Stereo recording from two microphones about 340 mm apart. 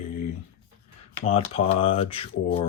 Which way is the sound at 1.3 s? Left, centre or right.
Centre.